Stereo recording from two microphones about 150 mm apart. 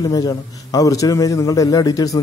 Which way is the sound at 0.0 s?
25° left (ahead or behind).